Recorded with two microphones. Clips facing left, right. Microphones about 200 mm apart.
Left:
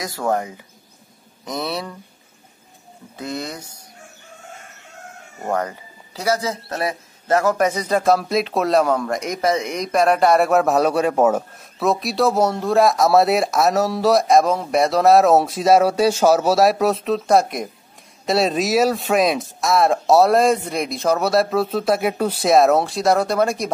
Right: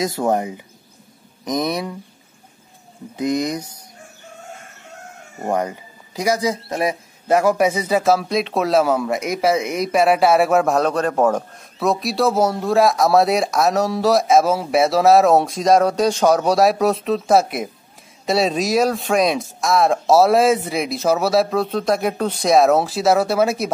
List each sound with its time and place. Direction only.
0.0 s speech: 20° right (ahead or behind)
3.2 s speech: 15° right (ahead or behind)
5.4 s speech: 15° right (ahead or behind)